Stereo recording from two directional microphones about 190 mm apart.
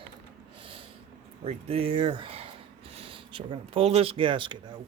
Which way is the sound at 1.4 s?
30° right (ahead or behind).